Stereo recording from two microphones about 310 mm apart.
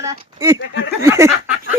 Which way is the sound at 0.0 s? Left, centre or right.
Centre.